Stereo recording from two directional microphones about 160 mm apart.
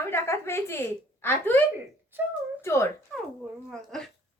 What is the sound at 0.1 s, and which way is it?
A woman's voice, 15° left (ahead or behind).